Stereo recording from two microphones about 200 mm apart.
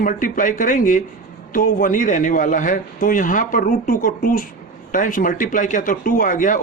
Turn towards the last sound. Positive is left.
turn(degrees=40)  # may be behind; listen again after turning